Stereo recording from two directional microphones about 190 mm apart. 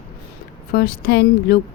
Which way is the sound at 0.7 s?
55° left (ahead or behind).